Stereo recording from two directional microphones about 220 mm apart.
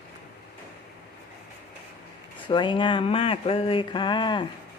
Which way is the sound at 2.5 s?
20° left (ahead or behind).